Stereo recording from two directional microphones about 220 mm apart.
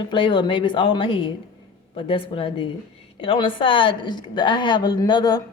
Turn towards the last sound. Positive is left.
turn(degrees=20)  # may be behind; listen again after turning